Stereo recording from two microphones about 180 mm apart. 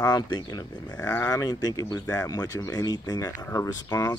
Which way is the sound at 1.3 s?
20° left (ahead or behind).